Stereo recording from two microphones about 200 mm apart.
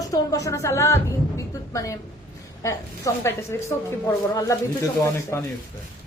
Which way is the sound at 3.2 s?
15° left (ahead or behind).